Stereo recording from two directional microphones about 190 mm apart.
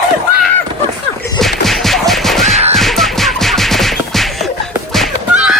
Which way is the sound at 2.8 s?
Centre (ahead or behind).